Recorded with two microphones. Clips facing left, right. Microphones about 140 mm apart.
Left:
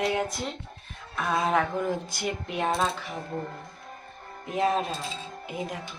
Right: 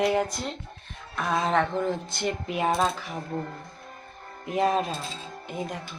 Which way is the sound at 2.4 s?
5° right (ahead or behind).